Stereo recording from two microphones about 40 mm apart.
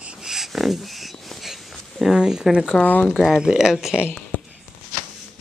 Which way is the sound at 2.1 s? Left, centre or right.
Centre.